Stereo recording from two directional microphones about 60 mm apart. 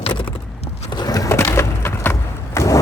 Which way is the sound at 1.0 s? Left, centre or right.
Left.